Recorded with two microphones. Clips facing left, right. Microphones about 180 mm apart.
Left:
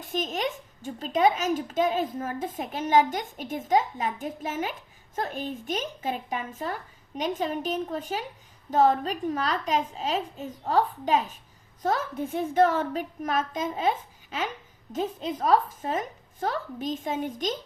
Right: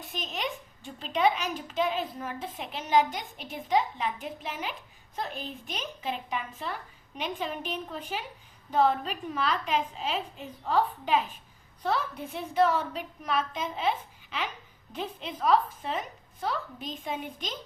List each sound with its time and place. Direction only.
0.0 s a woman's voice: 45° left (ahead or behind)